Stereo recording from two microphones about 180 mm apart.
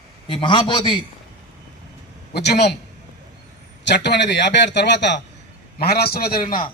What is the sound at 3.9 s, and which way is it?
A man's voice, 70° left (ahead or behind).